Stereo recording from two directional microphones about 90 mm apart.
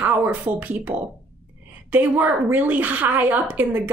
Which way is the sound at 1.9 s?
20° right (ahead or behind).